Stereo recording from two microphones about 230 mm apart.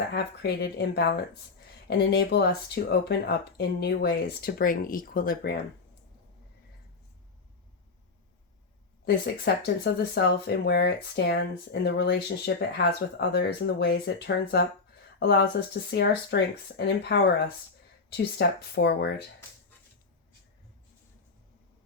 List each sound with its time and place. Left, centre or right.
0.1 s speech: left
9.0 s speech: left
18.3 s speech: left